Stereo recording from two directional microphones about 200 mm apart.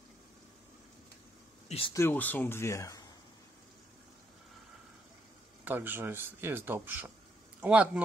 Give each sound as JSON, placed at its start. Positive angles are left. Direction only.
{"t": 1.7, "sound": "speech", "side_deg": 25}
{"t": 2.0, "sound": "speech", "side_deg": 10}
{"t": 5.7, "sound": "speech", "side_deg": -10}